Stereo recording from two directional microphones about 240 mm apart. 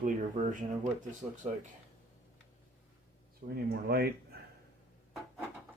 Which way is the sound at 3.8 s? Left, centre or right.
Right.